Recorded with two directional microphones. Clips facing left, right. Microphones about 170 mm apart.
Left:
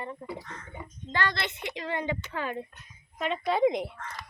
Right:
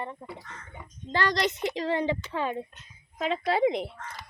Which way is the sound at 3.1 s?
90° right.